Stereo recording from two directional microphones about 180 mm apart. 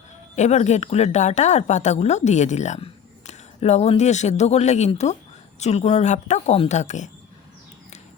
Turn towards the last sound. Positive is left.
turn(degrees=40)  # may be behind; listen again after turning